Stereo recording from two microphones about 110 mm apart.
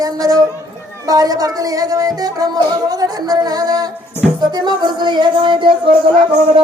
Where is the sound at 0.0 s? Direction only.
35° right (ahead or behind).